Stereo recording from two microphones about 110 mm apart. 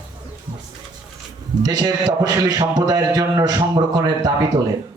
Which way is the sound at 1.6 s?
35° right (ahead or behind).